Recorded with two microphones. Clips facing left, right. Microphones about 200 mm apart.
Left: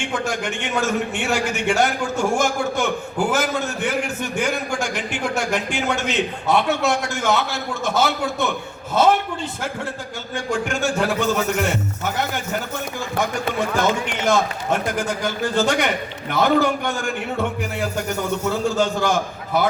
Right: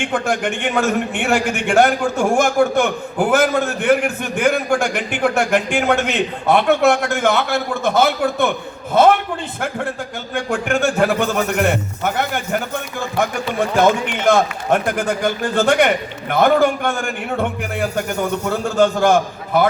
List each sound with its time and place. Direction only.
0.1 s a man's voice: 55° right (ahead or behind)
10.3 s a man's voice: 55° right (ahead or behind)
13.6 s a man's voice: 55° right (ahead or behind)
18.4 s a man's voice: 55° right (ahead or behind)